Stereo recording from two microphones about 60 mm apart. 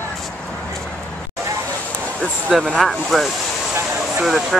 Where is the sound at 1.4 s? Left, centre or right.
Right.